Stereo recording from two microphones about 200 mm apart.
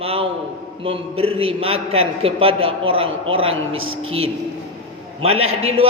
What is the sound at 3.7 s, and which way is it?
Speech, 90° right.